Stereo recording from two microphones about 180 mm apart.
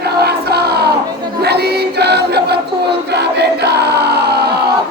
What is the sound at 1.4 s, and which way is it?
Choir, 65° right (ahead or behind).